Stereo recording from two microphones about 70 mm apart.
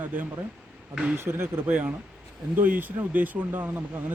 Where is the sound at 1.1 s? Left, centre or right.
Right.